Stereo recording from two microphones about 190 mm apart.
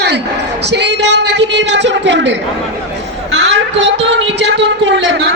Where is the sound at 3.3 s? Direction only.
80° right.